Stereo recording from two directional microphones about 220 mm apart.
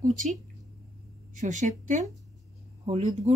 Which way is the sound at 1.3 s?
35° right (ahead or behind).